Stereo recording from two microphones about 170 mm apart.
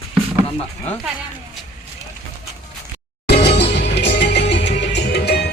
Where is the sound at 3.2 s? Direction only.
75° left (ahead or behind).